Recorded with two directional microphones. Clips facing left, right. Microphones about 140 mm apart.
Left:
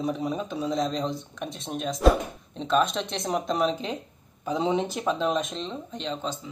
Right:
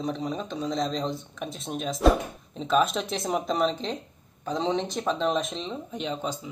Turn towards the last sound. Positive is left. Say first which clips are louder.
# right 1 dB
turn(degrees=-10)  # may be behind; listen again after turning